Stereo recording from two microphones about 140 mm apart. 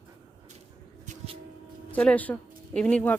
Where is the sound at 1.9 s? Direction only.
10° left (ahead or behind).